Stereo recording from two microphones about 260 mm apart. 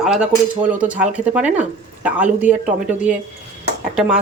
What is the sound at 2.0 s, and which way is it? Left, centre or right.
Speech, centre.